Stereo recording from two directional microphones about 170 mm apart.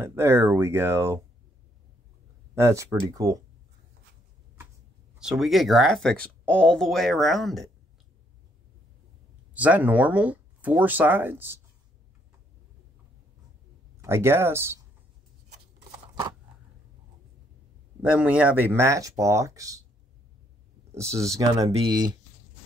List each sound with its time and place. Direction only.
0.0 s speech: 15° right (ahead or behind)
2.5 s speech: 15° right (ahead or behind)
5.2 s speech: centre (ahead or behind)
9.5 s speech: 10° right (ahead or behind)
14.0 s speech: 15° right (ahead or behind)
18.0 s speech: 5° right (ahead or behind)
21.4 s speech: 20° right (ahead or behind)